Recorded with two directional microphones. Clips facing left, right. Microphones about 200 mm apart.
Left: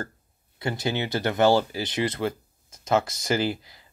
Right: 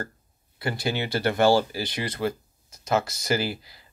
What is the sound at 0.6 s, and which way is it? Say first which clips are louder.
Speech: left 1 dB; 20° left (ahead or behind).